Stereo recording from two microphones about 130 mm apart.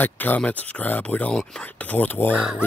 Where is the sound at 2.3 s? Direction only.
5° right (ahead or behind).